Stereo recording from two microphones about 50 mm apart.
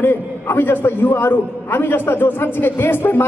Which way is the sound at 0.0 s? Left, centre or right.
Left.